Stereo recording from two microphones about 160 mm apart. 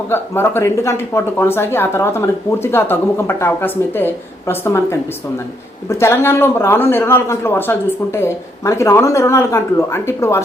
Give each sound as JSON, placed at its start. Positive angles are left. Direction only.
{"t": 0.1, "sound": "speech", "side_deg": 15}